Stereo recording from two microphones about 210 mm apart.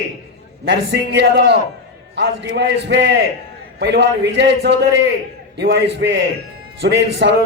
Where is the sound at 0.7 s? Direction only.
55° right (ahead or behind).